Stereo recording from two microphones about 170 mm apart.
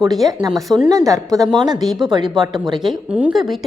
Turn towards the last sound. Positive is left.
turn(degrees=-5)  # may be behind; listen again after turning